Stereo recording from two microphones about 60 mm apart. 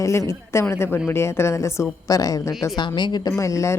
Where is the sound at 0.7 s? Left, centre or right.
Left.